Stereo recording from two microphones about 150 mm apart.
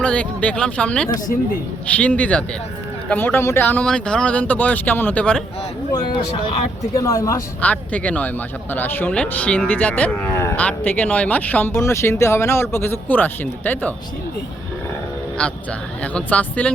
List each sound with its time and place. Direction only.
0.0 s speech: 10° left (ahead or behind)
5.9 s speech: 40° left (ahead or behind)
6.9 s speech: 20° left (ahead or behind)
7.6 s speech: 10° left (ahead or behind)
15.4 s speech: 10° left (ahead or behind)